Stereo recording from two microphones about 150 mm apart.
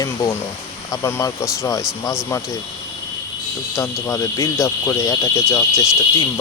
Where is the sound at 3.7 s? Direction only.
20° left (ahead or behind).